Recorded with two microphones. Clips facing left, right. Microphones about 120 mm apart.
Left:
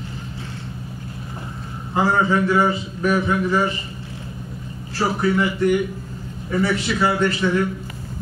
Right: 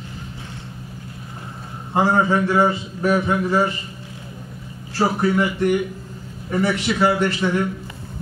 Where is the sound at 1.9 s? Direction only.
25° right (ahead or behind).